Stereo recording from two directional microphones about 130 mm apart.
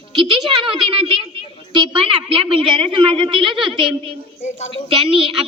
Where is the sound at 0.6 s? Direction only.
40° right (ahead or behind).